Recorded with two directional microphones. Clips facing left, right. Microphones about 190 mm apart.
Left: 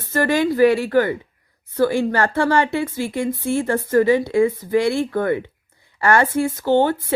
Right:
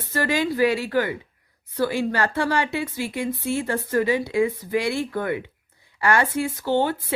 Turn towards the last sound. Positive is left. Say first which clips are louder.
# left 5 dB
turn(degrees=50)  # may be behind; listen again after turning